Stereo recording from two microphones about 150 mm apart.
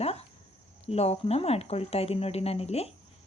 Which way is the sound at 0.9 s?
45° left (ahead or behind).